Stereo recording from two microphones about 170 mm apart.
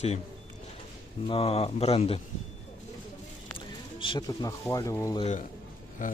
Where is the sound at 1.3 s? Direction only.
35° left (ahead or behind).